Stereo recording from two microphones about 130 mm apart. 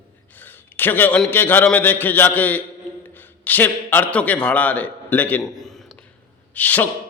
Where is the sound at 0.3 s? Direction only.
15° left (ahead or behind).